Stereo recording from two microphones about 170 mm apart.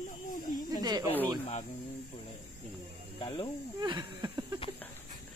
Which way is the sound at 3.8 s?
25° right (ahead or behind).